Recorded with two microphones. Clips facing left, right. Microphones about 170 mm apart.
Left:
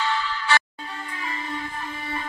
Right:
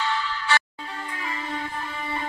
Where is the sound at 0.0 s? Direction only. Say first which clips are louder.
Left 1 dB; 90° left.